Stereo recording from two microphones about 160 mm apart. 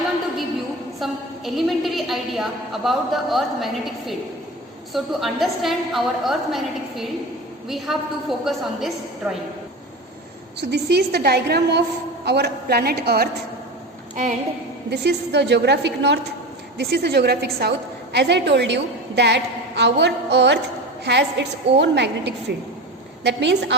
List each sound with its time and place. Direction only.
0.9 s a woman's voice: centre (ahead or behind)
10.6 s a woman's voice: 90° right
14.8 s a woman's voice: 90° right